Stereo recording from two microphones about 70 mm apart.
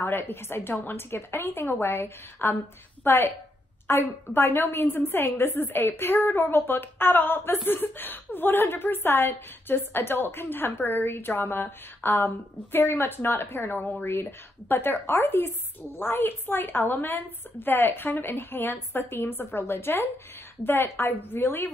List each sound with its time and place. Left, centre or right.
0.0 s a woman's voice: left